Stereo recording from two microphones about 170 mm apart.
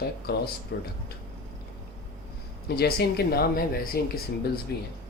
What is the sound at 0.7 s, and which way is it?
Speech, 80° left.